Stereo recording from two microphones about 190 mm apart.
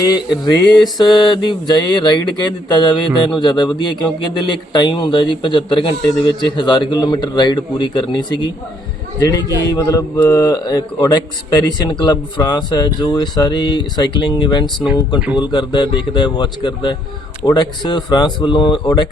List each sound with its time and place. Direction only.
0.0 s a man's voice: 20° left (ahead or behind)